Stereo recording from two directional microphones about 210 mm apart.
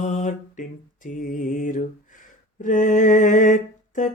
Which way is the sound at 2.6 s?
35° left (ahead or behind).